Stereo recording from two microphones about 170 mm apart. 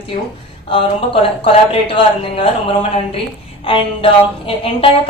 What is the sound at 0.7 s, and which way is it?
Speech, 30° left (ahead or behind).